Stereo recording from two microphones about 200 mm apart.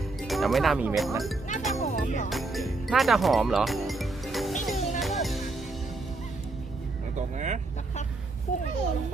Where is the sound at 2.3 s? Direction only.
Centre (ahead or behind).